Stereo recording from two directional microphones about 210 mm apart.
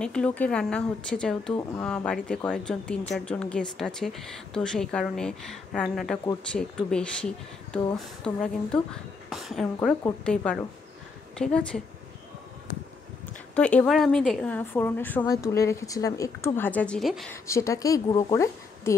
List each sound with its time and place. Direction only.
0.0 s a woman's voice: 5° left (ahead or behind)
13.6 s a woman's voice: 5° left (ahead or behind)
17.3 s a woman's voice: 15° left (ahead or behind)